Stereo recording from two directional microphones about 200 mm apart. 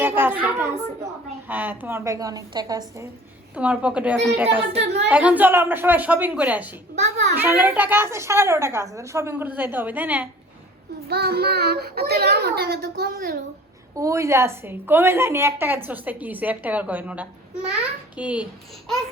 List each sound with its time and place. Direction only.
0.0 s a sound: 10° right (ahead or behind)
1.5 s a woman's voice: 10° right (ahead or behind)
3.5 s a woman's voice: 5° right (ahead or behind)
7.0 s a child's voice: 60° right (ahead or behind)
7.3 s a woman's voice: 10° right (ahead or behind)
11.1 s a child's voice: 50° right (ahead or behind)
13.9 s a woman's voice: 15° right (ahead or behind)